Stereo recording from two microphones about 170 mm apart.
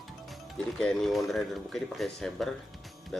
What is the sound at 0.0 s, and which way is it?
Speech, centre (ahead or behind).